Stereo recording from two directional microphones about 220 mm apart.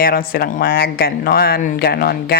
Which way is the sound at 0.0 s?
45° left (ahead or behind).